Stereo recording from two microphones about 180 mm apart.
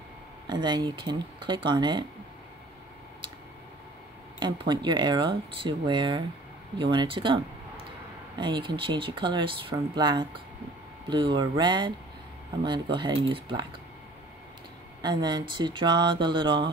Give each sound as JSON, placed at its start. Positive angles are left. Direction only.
{"t": 0.5, "sound": "speech", "side_deg": -25}
{"t": 4.4, "sound": "speech", "side_deg": -25}
{"t": 15.0, "sound": "speech", "side_deg": -25}